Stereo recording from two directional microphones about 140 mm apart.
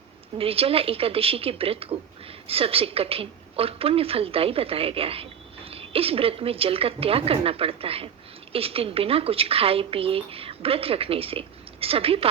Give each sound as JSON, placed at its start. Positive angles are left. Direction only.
{"t": 0.3, "sound": "a woman's voice", "side_deg": -45}